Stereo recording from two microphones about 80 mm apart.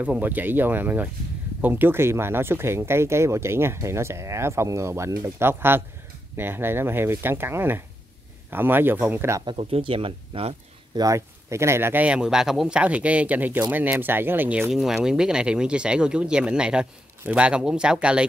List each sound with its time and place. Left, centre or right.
0.0 s speech: right
11.0 s speech: right
12.0 s speech: centre
14.7 s speech: centre